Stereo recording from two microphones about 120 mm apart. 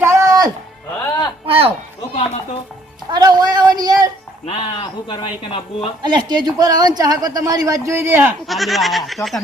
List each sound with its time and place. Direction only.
0.0 s music: 20° right (ahead or behind)
1.5 s a sound: 50° right (ahead or behind)
3.1 s a sound: 35° right (ahead or behind)
4.4 s speech: 45° left (ahead or behind)
6.0 s speech: 40° right (ahead or behind); by 8.4 s 20° right (ahead or behind)
8.4 s speech: centre (ahead or behind)